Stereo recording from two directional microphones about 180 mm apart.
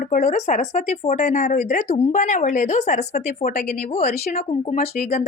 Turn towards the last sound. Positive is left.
turn(degrees=40)  # may be behind; listen again after turning